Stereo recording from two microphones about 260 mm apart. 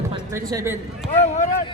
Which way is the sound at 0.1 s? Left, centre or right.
Centre.